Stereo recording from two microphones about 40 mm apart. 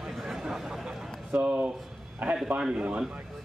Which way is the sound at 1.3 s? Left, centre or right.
Right.